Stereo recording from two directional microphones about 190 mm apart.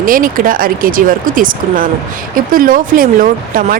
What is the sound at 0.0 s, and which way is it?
Speech, 45° right (ahead or behind).